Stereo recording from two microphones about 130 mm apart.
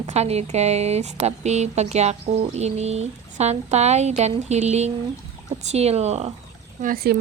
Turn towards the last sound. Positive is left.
turn(degrees=-65)  # may be behind; listen again after turning